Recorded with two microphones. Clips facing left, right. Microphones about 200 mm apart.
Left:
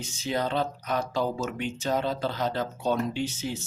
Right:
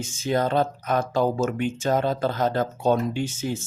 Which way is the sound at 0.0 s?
50° right (ahead or behind).